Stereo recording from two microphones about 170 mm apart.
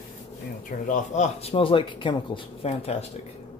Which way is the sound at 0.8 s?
45° left (ahead or behind).